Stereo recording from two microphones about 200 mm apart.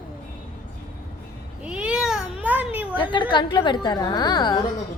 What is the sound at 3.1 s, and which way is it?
A woman's voice, 25° left (ahead or behind).